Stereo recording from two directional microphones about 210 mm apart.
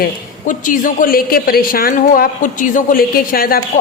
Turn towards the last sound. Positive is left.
turn(degrees=45)  # may be behind; listen again after turning